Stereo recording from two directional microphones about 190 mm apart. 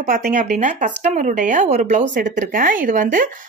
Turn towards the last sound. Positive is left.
turn(degrees=-45)  # may be behind; listen again after turning